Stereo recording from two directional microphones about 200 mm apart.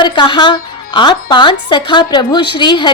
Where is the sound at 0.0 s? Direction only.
20° left (ahead or behind).